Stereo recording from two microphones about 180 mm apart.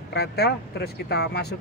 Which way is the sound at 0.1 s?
65° left (ahead or behind).